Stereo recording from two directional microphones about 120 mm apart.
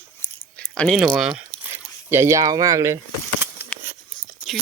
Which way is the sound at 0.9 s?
5° right (ahead or behind).